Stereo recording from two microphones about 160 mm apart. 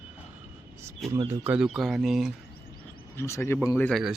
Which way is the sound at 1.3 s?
15° right (ahead or behind).